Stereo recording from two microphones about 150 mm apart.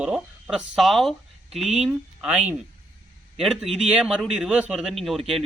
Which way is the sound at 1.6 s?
45° right (ahead or behind).